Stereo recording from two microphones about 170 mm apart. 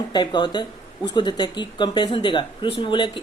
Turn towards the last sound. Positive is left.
turn(degrees=30)  # may be behind; listen again after turning